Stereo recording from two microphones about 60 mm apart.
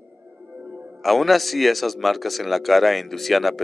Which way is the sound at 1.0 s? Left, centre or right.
Centre.